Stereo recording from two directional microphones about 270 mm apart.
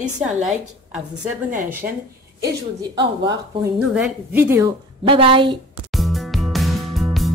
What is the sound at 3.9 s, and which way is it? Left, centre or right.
Speech, centre.